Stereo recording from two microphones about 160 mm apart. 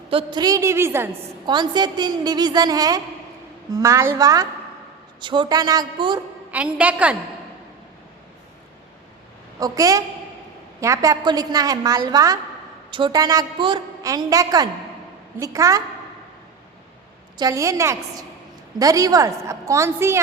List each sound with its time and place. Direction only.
0.1 s a woman's voice: 30° right (ahead or behind); by 1.2 s 15° right (ahead or behind)
1.5 s a woman's voice: 25° right (ahead or behind)
6.5 s a woman's voice: 10° right (ahead or behind)
9.6 s a woman's voice: 20° right (ahead or behind)
17.3 s a woman's voice: 20° right (ahead or behind)